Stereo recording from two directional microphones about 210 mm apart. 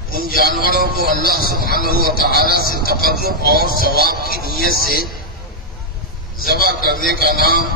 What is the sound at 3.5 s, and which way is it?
Speech, 45° left (ahead or behind).